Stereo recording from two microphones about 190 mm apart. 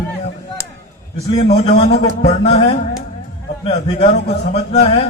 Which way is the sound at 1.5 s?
35° left (ahead or behind).